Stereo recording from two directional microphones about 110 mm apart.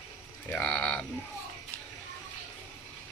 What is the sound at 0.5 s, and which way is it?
Speech, 10° left (ahead or behind).